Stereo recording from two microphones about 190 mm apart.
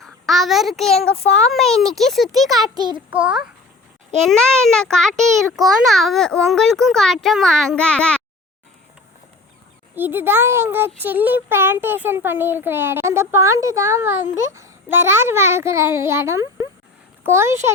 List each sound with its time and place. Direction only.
0.0 s a child's voice: centre (ahead or behind)
2.7 s a sound: 20° right (ahead or behind)
3.1 s a child's voice: 5° right (ahead or behind)
9.9 s a child's voice: 10° right (ahead or behind)